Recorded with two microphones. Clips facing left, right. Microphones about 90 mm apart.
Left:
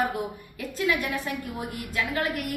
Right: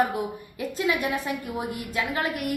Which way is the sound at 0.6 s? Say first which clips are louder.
Right 1 dB; 20° right (ahead or behind).